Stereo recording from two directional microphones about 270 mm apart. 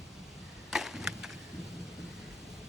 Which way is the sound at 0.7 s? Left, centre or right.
Centre.